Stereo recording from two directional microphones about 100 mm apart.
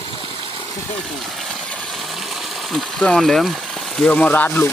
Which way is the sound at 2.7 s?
5° left (ahead or behind).